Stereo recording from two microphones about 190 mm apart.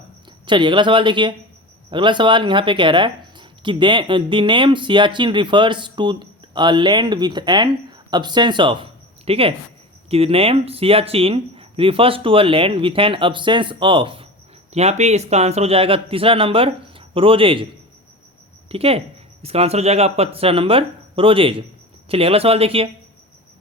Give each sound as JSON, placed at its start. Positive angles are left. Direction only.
{"t": 0.4, "sound": "speech", "side_deg": -25}
{"t": 18.7, "sound": "speech", "side_deg": -30}